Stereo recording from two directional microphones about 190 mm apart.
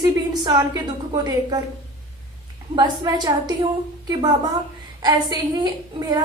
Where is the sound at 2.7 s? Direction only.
20° right (ahead or behind).